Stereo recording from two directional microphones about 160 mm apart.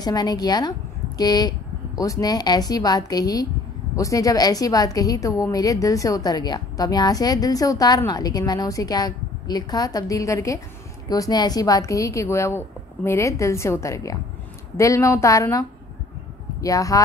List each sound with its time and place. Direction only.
0.0 s a woman's voice: 25° left (ahead or behind)
16.6 s a woman's voice: 20° left (ahead or behind)